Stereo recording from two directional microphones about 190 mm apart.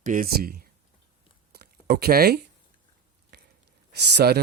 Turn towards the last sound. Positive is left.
turn(degrees=-60)  # may be behind; listen again after turning